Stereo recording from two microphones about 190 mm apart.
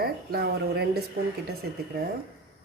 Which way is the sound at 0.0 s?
55° right (ahead or behind).